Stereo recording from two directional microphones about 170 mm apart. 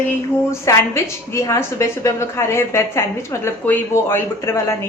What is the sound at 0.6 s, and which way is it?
A woman's voice, 15° left (ahead or behind).